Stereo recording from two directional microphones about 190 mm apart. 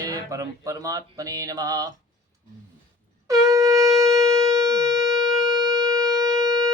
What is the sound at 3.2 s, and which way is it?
Shofar, 15° right (ahead or behind).